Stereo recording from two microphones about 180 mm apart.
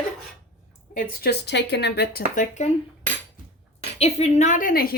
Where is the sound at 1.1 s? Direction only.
60° left (ahead or behind); by 2.7 s 40° left (ahead or behind).